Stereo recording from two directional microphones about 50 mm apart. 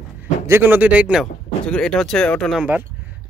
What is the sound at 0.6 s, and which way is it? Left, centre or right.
Speech, right.